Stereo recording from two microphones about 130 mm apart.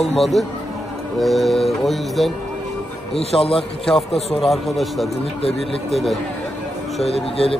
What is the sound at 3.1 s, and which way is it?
Speech, 50° left (ahead or behind).